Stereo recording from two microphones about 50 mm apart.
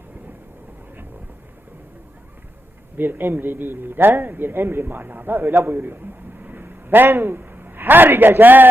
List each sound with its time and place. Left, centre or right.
3.0 s speech: right